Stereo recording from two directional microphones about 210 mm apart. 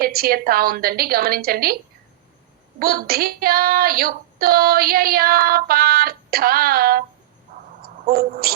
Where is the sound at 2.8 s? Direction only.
45° right (ahead or behind).